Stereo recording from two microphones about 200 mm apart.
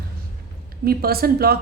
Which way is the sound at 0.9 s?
50° right (ahead or behind).